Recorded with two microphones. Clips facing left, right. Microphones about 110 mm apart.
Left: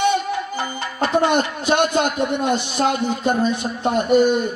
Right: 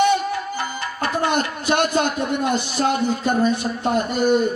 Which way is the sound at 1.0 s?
20° left (ahead or behind).